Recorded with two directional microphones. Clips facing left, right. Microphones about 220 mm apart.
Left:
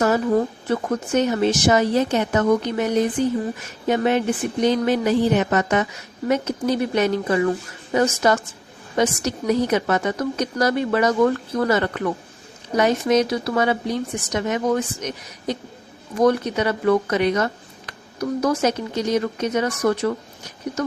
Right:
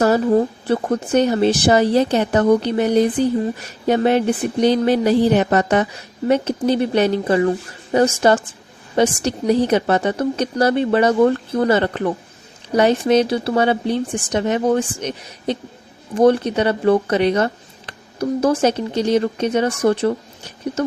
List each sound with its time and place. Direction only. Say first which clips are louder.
0.0 s speech: right 4 dB; 35° right (ahead or behind)